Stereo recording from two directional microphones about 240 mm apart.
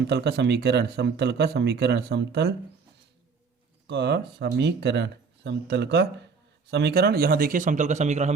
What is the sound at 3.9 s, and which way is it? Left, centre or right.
A man's voice, right.